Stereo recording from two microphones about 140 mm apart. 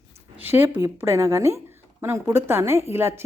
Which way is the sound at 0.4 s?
15° right (ahead or behind).